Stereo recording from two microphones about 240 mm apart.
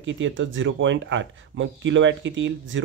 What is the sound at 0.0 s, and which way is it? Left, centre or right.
Speech, right.